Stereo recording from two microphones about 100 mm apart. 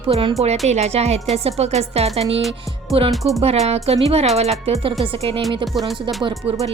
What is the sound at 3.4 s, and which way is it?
Speech, 90° right.